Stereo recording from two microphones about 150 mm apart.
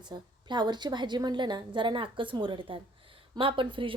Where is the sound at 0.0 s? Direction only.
30° right (ahead or behind).